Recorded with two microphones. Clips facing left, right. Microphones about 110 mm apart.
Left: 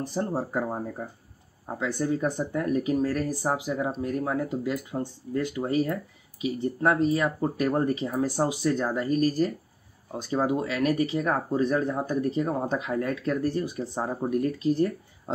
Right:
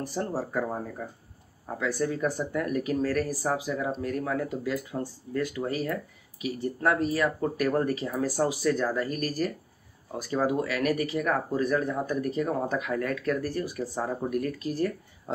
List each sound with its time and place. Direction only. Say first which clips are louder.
0.0 s speech: left 2 dB; 20° left (ahead or behind)